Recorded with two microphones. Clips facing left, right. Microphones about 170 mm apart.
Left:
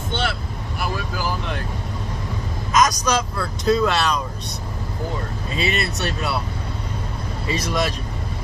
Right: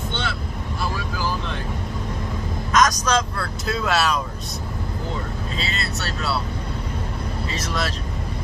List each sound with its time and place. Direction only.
2.7 s vehicle: 10° left (ahead or behind)
3.6 s speech: 5° right (ahead or behind)
5.6 s speech: 20° left (ahead or behind)
7.5 s speech: 15° left (ahead or behind)